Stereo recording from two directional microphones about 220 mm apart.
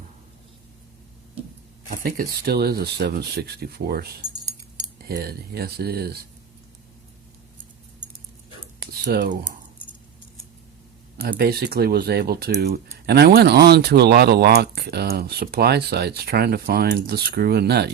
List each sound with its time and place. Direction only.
1.9 s speech: 40° right (ahead or behind)
8.9 s speech: 45° right (ahead or behind)
11.2 s speech: 45° right (ahead or behind)